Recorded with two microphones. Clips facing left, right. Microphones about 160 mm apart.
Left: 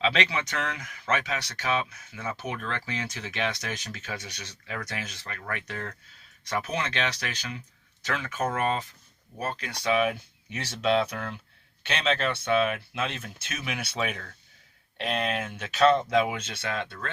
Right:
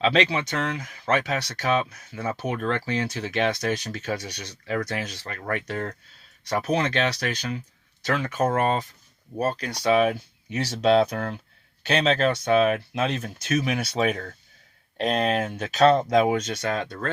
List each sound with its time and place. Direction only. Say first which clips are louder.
0.0 s speech: right 5 dB; 35° right (ahead or behind)